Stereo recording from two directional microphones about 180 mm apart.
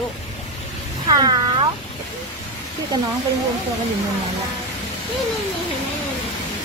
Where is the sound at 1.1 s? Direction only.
20° right (ahead or behind).